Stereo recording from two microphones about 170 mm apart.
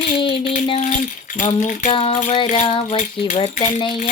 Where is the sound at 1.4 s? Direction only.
45° left (ahead or behind).